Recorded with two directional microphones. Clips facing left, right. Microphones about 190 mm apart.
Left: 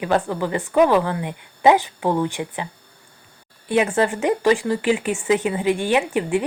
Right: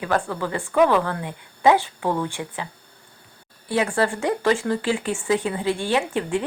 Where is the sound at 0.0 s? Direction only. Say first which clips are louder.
Left 3 dB; 15° left (ahead or behind).